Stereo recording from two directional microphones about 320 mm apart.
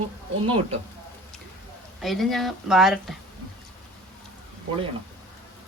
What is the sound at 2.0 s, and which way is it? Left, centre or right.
A woman's voice, centre.